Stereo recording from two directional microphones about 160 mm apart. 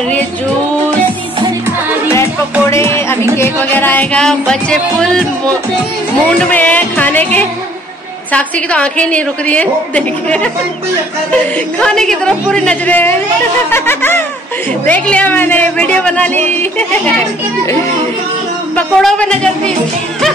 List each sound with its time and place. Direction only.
2.7 s music: 15° left (ahead or behind)
3.3 s speech: 15° left (ahead or behind)
6.3 s a woman's voice: 10° left (ahead or behind)
18.8 s a woman's voice: 5° left (ahead or behind)